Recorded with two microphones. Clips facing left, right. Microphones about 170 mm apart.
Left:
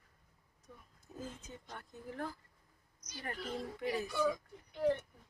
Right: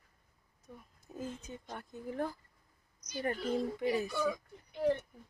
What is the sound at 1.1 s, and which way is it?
Speech, 15° right (ahead or behind).